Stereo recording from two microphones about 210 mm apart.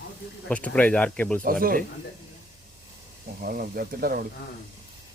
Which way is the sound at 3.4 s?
45° right (ahead or behind).